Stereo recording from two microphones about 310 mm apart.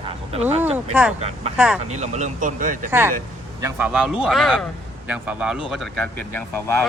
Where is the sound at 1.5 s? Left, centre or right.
Centre.